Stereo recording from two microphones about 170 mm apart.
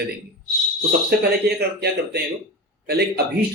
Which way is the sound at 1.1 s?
70° right (ahead or behind).